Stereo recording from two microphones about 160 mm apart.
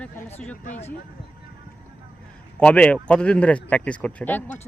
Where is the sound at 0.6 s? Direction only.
50° left (ahead or behind).